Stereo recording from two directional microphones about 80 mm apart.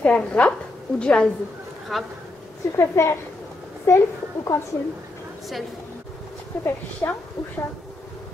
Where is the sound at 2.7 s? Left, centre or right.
Left.